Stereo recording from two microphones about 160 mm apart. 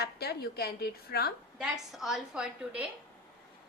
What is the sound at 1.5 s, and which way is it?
A woman's voice, 5° right (ahead or behind).